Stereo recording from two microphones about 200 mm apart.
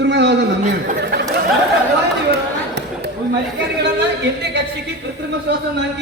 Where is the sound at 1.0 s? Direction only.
55° right (ahead or behind).